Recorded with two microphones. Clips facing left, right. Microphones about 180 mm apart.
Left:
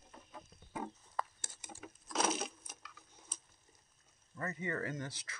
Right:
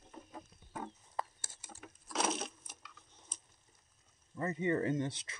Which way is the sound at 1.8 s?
Centre (ahead or behind).